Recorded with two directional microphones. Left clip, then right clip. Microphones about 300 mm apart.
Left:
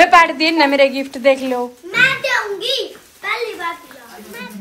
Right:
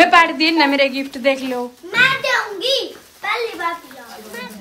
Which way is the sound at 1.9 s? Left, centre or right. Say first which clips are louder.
Even; right.